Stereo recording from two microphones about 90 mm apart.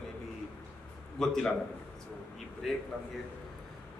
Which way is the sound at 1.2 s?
5° left (ahead or behind).